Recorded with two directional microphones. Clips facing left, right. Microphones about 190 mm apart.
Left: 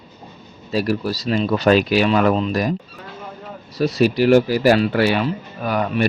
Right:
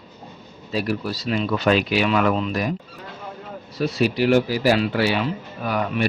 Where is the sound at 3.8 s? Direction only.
40° left (ahead or behind).